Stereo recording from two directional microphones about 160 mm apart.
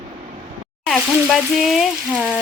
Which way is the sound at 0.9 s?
Centre (ahead or behind).